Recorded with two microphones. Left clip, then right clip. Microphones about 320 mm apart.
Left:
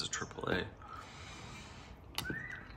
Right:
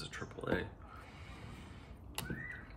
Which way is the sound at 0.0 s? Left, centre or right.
Centre.